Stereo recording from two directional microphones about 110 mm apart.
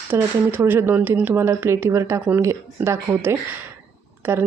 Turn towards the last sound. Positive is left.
turn(degrees=-20)  # may be behind; listen again after turning